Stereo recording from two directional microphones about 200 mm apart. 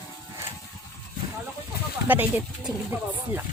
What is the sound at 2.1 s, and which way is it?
Speech, 10° right (ahead or behind).